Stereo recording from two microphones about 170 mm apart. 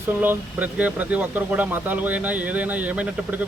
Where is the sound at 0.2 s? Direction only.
10° right (ahead or behind).